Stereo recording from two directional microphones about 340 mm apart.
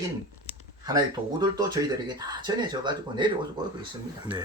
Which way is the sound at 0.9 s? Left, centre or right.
Centre.